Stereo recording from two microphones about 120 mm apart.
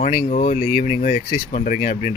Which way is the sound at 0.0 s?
90° left.